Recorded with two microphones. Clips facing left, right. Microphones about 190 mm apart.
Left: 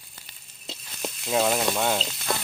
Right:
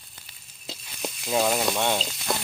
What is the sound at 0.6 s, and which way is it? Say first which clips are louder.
Stir: even; centre (ahead or behind).